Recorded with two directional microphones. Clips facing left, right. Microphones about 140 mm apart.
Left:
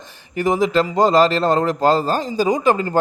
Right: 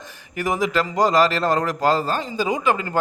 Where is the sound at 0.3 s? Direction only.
25° left (ahead or behind).